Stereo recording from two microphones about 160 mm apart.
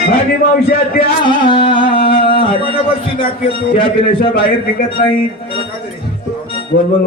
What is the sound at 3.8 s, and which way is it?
Speech, 35° left (ahead or behind).